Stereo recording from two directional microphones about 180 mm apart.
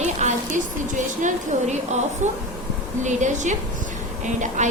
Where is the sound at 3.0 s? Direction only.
40° right (ahead or behind).